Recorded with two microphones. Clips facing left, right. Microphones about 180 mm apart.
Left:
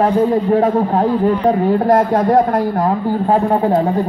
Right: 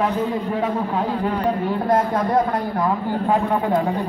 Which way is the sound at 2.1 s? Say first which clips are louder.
Left 7 dB; 40° left (ahead or behind).